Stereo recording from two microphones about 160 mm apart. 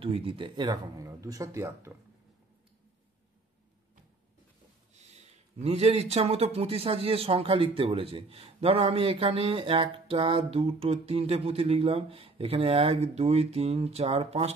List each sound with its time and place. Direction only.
0.0 s speech: 35° right (ahead or behind); by 2.0 s 20° right (ahead or behind)
4.9 s a man's voice: 45° right (ahead or behind)